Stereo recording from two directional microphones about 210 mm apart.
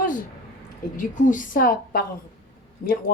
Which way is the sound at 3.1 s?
45° left (ahead or behind).